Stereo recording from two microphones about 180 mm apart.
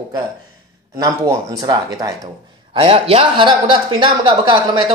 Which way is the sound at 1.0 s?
20° right (ahead or behind).